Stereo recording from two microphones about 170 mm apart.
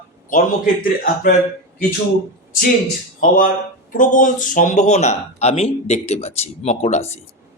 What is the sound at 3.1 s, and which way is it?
Speech, 55° left (ahead or behind).